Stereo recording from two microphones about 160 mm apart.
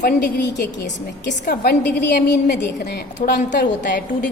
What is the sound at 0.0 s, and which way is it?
Speech, 90° left.